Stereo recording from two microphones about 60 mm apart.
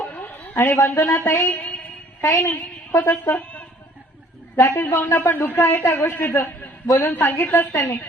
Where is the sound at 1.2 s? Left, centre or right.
Left.